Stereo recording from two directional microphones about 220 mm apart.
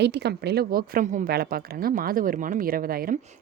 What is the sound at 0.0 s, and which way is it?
A woman's voice, 50° right (ahead or behind).